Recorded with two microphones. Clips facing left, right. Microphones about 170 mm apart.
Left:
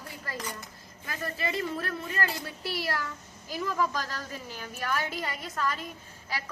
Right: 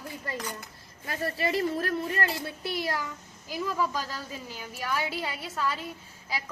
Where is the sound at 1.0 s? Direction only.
35° right (ahead or behind).